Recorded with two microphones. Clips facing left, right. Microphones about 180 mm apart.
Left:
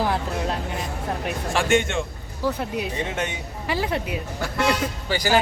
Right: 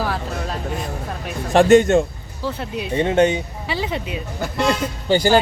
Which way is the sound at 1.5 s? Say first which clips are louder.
Right 10 dB; 35° right (ahead or behind).